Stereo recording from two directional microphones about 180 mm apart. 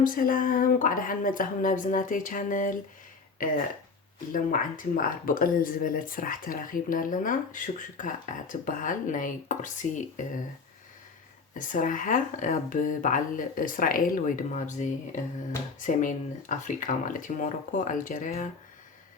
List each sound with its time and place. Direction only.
0.0 s speech: 50° left (ahead or behind)
11.5 s speech: 45° left (ahead or behind)